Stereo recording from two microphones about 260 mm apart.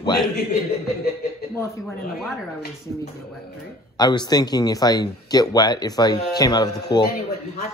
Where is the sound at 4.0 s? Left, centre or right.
Centre.